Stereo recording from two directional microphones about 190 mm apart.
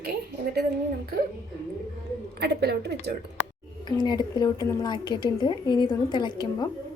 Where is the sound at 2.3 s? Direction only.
60° right (ahead or behind).